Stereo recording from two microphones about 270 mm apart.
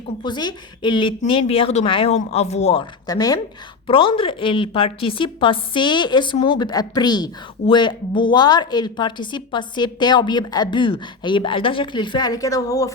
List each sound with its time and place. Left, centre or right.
0.2 s a woman's voice: centre